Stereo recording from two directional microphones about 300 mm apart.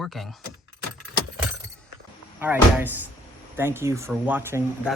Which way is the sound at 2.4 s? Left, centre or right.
Centre.